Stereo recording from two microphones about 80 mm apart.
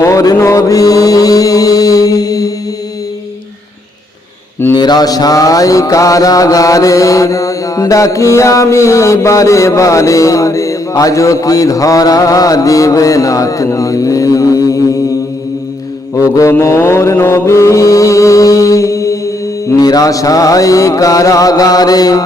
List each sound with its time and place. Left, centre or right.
0.0 s mantra: left
4.7 s mantra: left
16.1 s mantra: left
16.5 s mantra: left